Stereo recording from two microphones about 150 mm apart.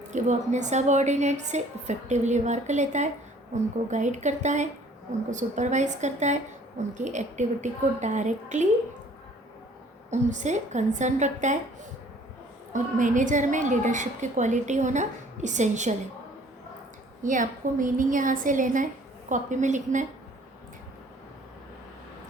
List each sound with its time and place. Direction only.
0.1 s a woman's voice: 55° right (ahead or behind)
10.1 s a woman's voice: 55° right (ahead or behind)
12.7 s a woman's voice: 60° right (ahead or behind)
17.2 s a woman's voice: 60° right (ahead or behind)